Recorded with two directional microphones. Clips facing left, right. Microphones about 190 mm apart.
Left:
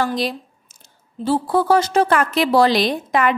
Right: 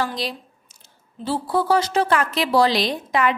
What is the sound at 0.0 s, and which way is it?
A woman's voice, 50° left (ahead or behind).